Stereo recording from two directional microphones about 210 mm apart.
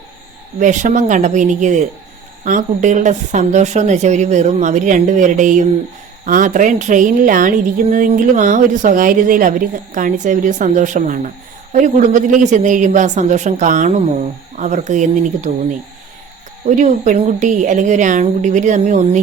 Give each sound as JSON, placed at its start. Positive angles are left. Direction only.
{"t": 0.6, "sound": "a woman's voice", "side_deg": -35}
{"t": 16.6, "sound": "a woman's voice", "side_deg": -35}